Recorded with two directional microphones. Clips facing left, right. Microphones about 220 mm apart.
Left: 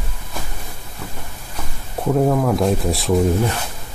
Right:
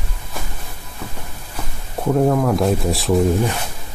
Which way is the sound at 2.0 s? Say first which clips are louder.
Right 1 dB; centre (ahead or behind).